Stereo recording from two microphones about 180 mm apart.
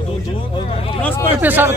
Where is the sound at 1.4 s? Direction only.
10° right (ahead or behind).